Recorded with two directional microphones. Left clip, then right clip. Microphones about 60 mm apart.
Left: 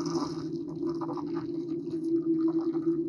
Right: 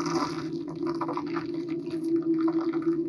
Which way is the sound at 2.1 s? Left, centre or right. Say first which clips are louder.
Right 2 dB; right.